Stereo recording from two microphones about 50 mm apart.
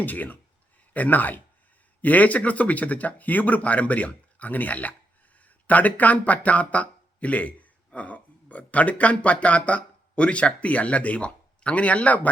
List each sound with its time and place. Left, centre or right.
0.0 s speech: left